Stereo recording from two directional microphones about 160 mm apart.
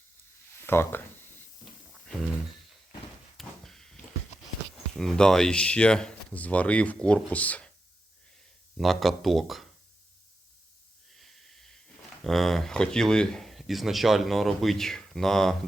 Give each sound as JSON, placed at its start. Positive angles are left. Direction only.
{"t": 0.6, "sound": "speech", "side_deg": 15}
{"t": 3.3, "sound": "a sound", "side_deg": 0}
{"t": 4.9, "sound": "speech", "side_deg": 5}
{"t": 8.8, "sound": "speech", "side_deg": 0}
{"t": 11.2, "sound": "wheeze", "side_deg": 0}
{"t": 12.2, "sound": "speech", "side_deg": 0}